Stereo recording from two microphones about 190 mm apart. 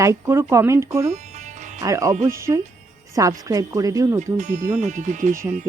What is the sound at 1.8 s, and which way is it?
Speech, 15° right (ahead or behind).